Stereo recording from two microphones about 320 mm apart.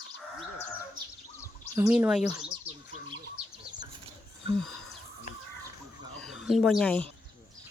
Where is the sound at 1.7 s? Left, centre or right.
Centre.